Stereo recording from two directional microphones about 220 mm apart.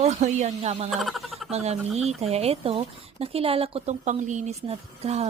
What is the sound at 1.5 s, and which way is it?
Speech, 30° right (ahead or behind).